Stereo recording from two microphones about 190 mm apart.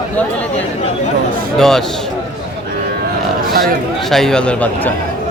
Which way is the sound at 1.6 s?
Centre (ahead or behind).